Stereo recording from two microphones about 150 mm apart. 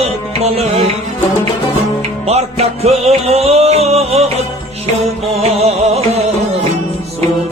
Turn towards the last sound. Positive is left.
turn(degrees=-45)  # may be behind; listen again after turning